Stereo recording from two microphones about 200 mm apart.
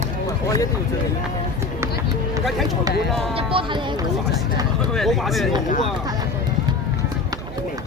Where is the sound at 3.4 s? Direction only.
25° right (ahead or behind).